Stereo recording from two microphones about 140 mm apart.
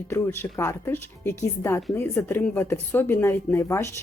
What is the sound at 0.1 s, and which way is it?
Speech, 20° left (ahead or behind).